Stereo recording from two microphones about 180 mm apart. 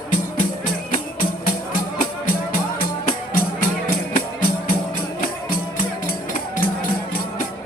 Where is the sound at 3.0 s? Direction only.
55° left (ahead or behind).